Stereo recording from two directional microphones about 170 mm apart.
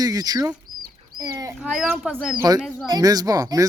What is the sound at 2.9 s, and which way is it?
Speech, 20° right (ahead or behind).